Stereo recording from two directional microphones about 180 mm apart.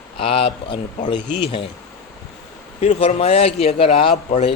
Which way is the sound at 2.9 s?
30° left (ahead or behind).